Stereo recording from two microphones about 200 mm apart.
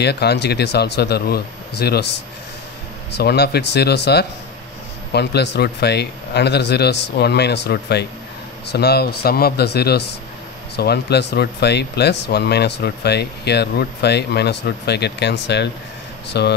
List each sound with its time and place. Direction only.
0.0 s speech: 55° left (ahead or behind)